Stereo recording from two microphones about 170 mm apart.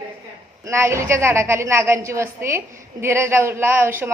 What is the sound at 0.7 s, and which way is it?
A woman's voice, 15° right (ahead or behind).